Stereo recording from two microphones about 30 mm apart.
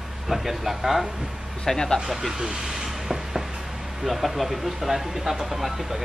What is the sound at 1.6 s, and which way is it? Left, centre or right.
Speech, centre.